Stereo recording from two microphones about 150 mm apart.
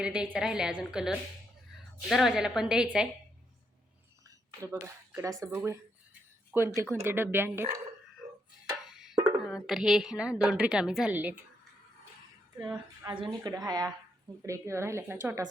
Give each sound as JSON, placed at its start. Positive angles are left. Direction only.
{"t": 0.0, "sound": "a woman's voice", "side_deg": -5}
{"t": 4.6, "sound": "a woman's voice", "side_deg": -15}
{"t": 8.7, "sound": "music", "side_deg": -5}
{"t": 9.4, "sound": "a woman's voice", "side_deg": 0}
{"t": 13.1, "sound": "a woman's voice", "side_deg": -30}